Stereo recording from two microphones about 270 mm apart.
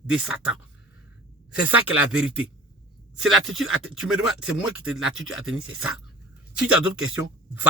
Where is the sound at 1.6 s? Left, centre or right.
Centre.